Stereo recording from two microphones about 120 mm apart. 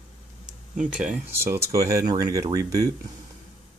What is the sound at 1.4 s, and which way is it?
Speech, 25° right (ahead or behind).